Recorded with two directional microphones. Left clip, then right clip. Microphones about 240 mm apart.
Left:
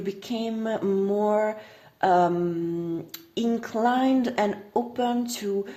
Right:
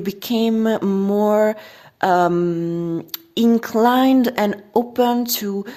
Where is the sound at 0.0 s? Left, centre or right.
Right.